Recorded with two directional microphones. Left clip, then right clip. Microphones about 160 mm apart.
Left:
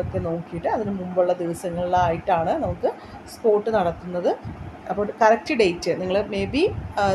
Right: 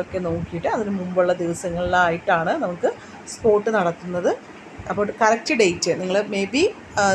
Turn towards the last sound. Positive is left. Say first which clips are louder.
# right 2 dB
turn(degrees=-15)  # may be behind; listen again after turning